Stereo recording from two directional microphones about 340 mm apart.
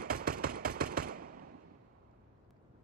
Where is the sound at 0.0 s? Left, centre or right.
Right.